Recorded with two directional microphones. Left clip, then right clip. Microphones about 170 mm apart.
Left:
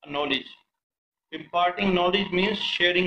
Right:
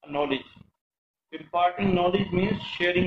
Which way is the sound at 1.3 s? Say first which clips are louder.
Even; 10° left (ahead or behind).